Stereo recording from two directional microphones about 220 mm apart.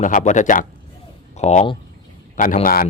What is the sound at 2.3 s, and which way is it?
Speech, 35° left (ahead or behind).